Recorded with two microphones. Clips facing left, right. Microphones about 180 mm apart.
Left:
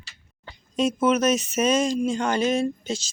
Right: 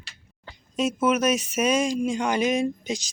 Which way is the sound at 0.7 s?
5° right (ahead or behind).